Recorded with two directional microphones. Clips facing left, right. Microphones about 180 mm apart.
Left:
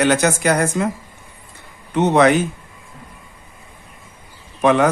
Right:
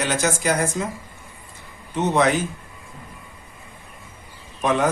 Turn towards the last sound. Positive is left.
turn(degrees=70)  # may be behind; listen again after turning